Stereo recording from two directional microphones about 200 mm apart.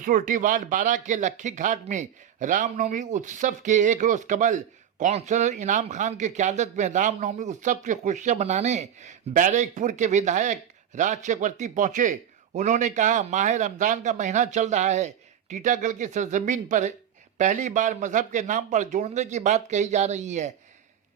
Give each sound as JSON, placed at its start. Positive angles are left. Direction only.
{"t": 0.0, "sound": "speech", "side_deg": -45}